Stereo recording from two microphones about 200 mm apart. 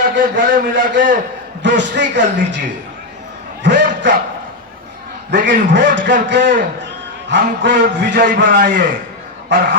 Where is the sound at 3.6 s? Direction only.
60° right (ahead or behind).